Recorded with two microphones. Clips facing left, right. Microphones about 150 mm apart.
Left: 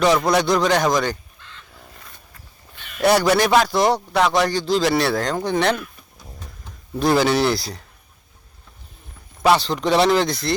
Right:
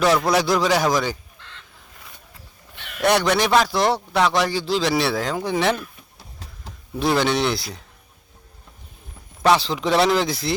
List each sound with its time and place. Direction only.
0.0 s a man's voice: centre (ahead or behind)
1.4 s fowl: 70° right (ahead or behind)
2.7 s a sound: 70° right (ahead or behind)
3.0 s a man's voice: centre (ahead or behind)
6.9 s a man's voice: centre (ahead or behind)
9.4 s a man's voice: centre (ahead or behind)